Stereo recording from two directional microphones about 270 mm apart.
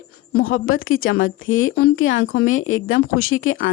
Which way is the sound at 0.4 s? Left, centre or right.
Left.